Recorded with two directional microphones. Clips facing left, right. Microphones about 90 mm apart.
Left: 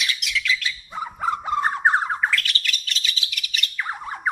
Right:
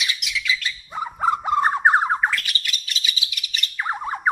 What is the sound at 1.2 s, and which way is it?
Bird, 20° right (ahead or behind).